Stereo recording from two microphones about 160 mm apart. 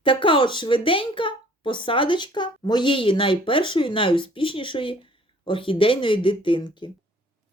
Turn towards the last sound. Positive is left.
turn(degrees=30)  # may be behind; listen again after turning